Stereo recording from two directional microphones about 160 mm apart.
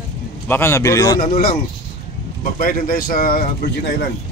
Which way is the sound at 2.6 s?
65° left (ahead or behind).